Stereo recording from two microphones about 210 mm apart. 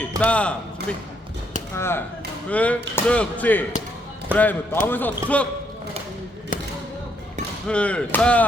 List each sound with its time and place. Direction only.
0.2 s speech: 5° left (ahead or behind)
6.5 s basketball bounce: 40° left (ahead or behind)
7.7 s speech: 5° left (ahead or behind)